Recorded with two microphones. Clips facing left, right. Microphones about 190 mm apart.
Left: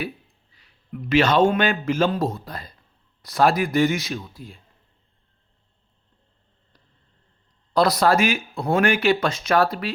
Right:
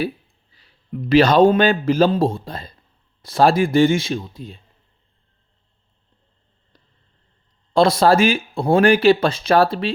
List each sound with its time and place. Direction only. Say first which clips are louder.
0.5 s a man's voice: right 5 dB; 30° right (ahead or behind)
7.7 s speech: right 4 dB; 25° right (ahead or behind)